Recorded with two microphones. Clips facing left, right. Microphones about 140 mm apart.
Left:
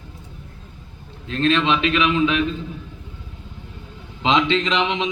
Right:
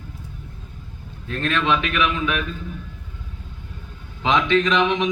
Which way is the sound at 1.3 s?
25° left (ahead or behind).